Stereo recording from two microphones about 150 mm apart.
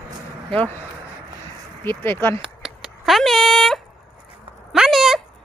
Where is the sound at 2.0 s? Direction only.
15° left (ahead or behind).